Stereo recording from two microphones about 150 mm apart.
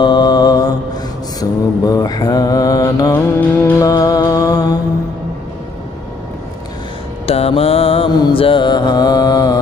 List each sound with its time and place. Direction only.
0.0 s mantra: 30° left (ahead or behind)
3.1 s music: 10° left (ahead or behind)
7.2 s mantra: 40° left (ahead or behind); by 9.6 s 25° left (ahead or behind)